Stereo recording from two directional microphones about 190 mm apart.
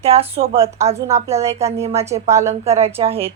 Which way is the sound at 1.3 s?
15° right (ahead or behind).